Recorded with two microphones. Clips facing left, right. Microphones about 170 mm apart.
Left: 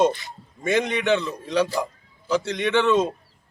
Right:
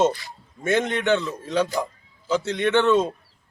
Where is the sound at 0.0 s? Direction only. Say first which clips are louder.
Left 1 dB; 20° left (ahead or behind).